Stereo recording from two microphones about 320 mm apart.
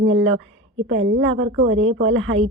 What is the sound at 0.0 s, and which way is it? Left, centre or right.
A woman's voice, right.